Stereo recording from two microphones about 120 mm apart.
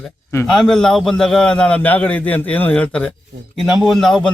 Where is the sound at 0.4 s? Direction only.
5° left (ahead or behind).